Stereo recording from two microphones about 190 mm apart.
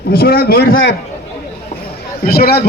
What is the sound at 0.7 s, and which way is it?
Speech, 80° left.